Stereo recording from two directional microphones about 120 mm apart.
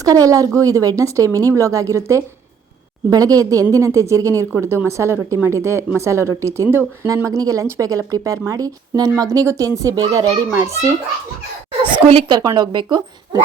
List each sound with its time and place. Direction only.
0.0 s a woman's voice: 30° right (ahead or behind)
11.9 s a woman's voice: 40° right (ahead or behind)